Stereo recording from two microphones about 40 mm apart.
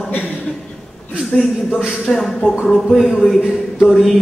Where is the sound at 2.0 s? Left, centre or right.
Centre.